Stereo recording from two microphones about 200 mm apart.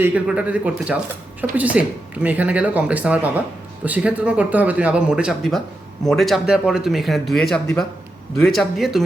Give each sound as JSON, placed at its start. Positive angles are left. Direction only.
{"t": 0.0, "sound": "speech", "side_deg": -5}